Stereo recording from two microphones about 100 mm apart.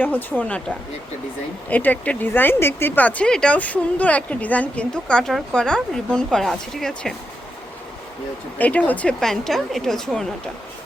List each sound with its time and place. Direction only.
0.0 s speech: 20° left (ahead or behind)
1.7 s speech: 15° left (ahead or behind)
8.5 s a woman's voice: 15° left (ahead or behind)